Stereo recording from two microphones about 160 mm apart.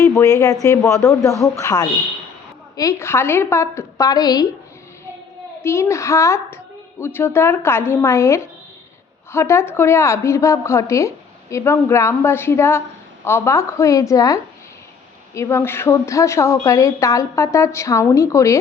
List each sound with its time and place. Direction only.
0.0 s a woman's voice: 20° left (ahead or behind)
5.6 s a woman's voice: 15° left (ahead or behind)
15.4 s a woman's voice: 15° left (ahead or behind)